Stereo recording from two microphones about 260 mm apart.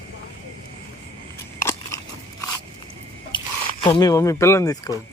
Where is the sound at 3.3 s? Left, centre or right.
Centre.